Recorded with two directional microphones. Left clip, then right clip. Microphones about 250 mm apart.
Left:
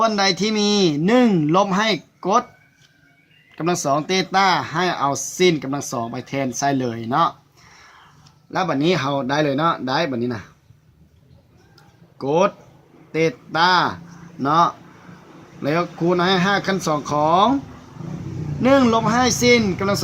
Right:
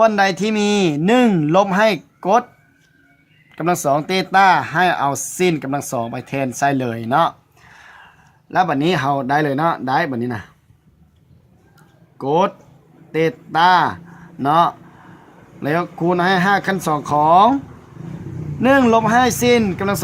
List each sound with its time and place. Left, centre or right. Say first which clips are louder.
0.0 s speech: right 4 dB; right
3.5 s speech: right 3 dB; right
8.4 s speech: right 3 dB; right
12.1 s speech: right 1 dB; right
18.6 s speech: right 3 dB; right